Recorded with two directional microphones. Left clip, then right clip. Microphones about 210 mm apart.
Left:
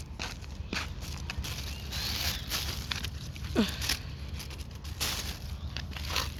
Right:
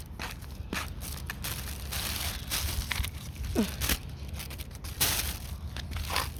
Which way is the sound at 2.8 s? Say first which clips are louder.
Right 1 dB; 25° right (ahead or behind).